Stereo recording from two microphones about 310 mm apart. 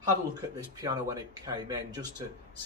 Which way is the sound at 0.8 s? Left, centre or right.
Centre.